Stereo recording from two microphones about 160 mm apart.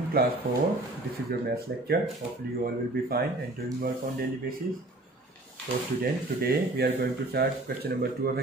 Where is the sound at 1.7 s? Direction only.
90° right.